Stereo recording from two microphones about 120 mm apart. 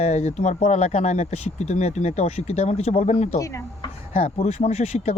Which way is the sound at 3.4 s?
25° left (ahead or behind).